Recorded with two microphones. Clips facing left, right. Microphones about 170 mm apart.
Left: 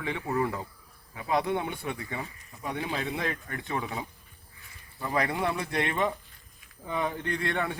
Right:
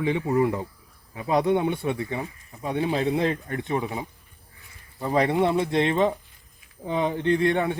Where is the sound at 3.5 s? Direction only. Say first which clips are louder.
Right 6 dB; 20° right (ahead or behind).